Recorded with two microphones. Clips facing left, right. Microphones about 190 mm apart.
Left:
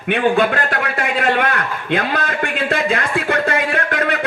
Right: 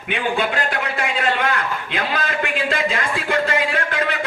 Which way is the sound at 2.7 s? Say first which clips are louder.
Left 3 dB; 55° left (ahead or behind).